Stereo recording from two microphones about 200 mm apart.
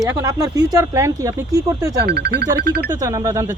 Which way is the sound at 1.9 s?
50° right (ahead or behind).